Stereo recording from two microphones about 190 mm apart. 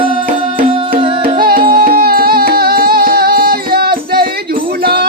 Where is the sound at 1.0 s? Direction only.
25° right (ahead or behind).